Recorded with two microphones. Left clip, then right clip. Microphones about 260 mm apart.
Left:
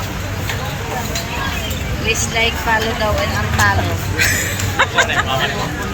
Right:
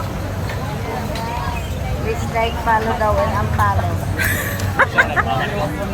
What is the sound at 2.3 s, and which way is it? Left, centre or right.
Speech, centre.